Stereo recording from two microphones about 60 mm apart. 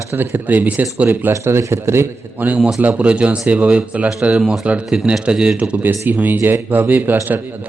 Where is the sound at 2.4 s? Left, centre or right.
Right.